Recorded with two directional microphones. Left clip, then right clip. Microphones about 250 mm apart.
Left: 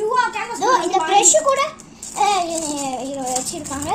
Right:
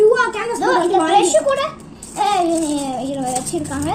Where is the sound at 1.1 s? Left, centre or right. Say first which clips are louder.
Left 2 dB; left.